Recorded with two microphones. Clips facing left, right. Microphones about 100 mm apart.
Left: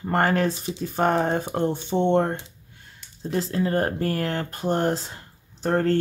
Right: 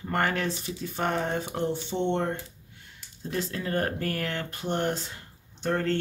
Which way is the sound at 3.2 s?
30° left (ahead or behind).